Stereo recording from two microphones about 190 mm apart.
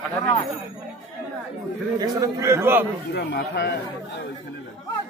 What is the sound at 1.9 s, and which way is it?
Speech, 20° right (ahead or behind).